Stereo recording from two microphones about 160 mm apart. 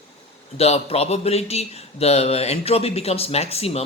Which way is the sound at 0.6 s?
40° left (ahead or behind).